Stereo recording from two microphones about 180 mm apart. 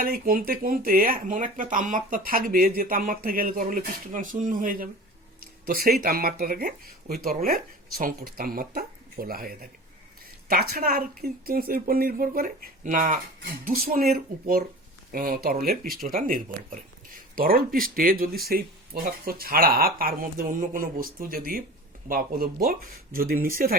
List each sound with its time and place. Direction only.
0.0 s speech: 50° right (ahead or behind)